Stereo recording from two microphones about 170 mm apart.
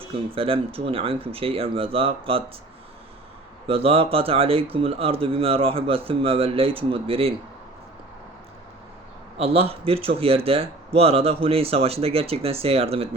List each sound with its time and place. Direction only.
0.3 s speech: 35° right (ahead or behind)
3.7 s speech: 35° right (ahead or behind)
9.4 s speech: 35° right (ahead or behind)